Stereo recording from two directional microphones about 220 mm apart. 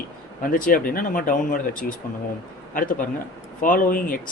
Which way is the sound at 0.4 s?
40° left (ahead or behind).